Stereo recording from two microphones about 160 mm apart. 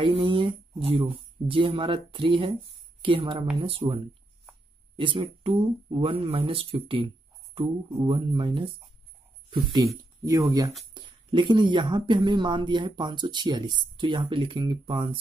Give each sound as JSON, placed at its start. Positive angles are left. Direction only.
{"t": 0.0, "sound": "speech", "side_deg": -30}